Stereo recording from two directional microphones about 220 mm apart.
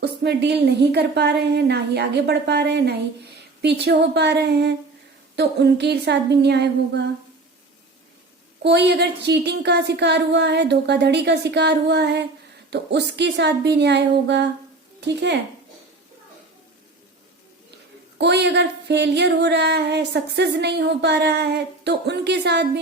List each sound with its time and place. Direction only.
0.0 s speech: 50° right (ahead or behind)
8.6 s speech: 50° right (ahead or behind)
18.2 s speech: 50° right (ahead or behind)